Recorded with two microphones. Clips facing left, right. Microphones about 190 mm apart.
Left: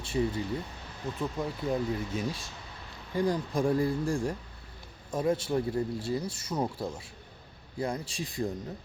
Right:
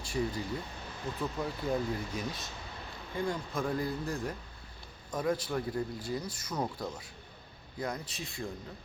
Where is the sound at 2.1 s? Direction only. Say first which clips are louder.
Left 4 dB; 25° left (ahead or behind).